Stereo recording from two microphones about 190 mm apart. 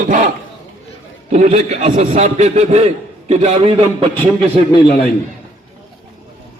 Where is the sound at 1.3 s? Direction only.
35° right (ahead or behind).